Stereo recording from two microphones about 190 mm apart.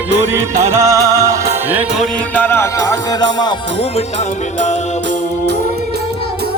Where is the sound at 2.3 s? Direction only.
10° left (ahead or behind).